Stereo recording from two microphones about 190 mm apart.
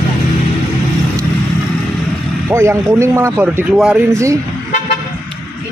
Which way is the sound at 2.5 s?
15° right (ahead or behind).